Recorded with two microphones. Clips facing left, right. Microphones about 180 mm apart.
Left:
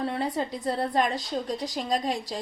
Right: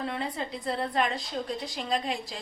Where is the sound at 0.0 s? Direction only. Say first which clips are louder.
Left 4 dB; 40° left (ahead or behind).